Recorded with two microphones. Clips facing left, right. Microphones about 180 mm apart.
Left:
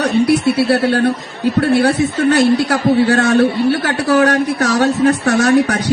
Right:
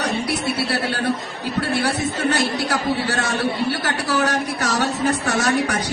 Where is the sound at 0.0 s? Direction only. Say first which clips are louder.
Left 10 dB; 60° left (ahead or behind).